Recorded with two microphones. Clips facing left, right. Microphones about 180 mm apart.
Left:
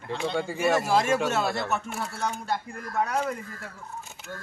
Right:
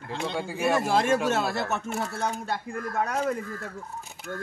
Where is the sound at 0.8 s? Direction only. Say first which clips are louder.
Even; 50° right (ahead or behind).